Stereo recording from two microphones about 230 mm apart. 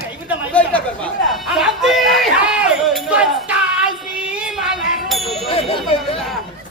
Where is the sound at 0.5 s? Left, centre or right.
Centre.